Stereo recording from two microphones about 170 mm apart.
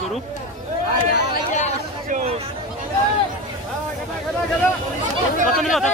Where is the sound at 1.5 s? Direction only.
45° left (ahead or behind).